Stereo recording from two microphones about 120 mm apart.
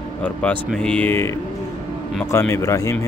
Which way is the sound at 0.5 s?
15° left (ahead or behind).